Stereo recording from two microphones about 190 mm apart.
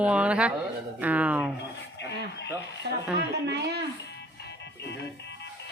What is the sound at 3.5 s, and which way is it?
Speech, 60° right (ahead or behind).